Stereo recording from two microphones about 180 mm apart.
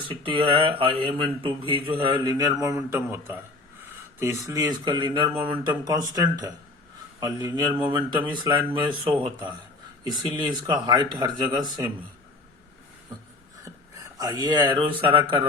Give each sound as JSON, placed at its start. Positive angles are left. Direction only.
{"t": 0.1, "sound": "speech", "side_deg": -30}
{"t": 14.2, "sound": "speech", "side_deg": -20}